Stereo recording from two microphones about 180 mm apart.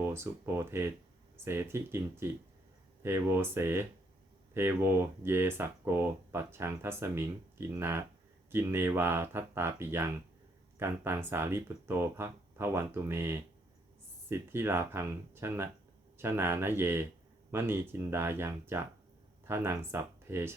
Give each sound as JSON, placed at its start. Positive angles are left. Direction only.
{"t": 0.0, "sound": "speech", "side_deg": -15}